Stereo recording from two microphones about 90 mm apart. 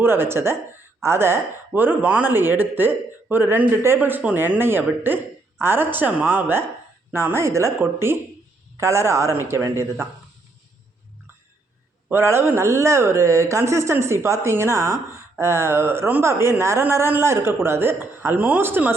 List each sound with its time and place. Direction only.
0.0 s speech: 25° right (ahead or behind)
12.1 s speech: 30° right (ahead or behind)